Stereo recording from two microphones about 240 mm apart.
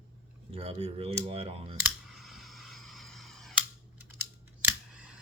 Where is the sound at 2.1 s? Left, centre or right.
Centre.